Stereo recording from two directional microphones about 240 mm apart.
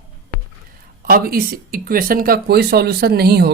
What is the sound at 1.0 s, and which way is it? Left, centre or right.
Speech, right.